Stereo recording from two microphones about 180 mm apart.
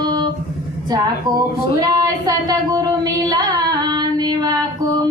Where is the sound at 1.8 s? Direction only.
20° right (ahead or behind).